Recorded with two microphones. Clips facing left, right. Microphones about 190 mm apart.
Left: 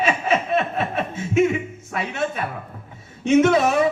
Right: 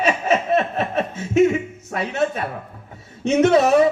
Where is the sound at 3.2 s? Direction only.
40° right (ahead or behind).